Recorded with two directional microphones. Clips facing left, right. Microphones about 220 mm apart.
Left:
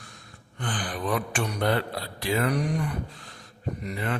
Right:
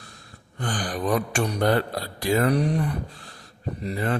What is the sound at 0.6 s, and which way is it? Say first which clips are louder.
Speech: right 4 dB; 40° right (ahead or behind).